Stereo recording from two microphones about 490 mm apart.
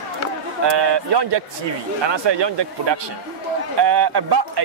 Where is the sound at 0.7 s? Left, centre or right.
Right.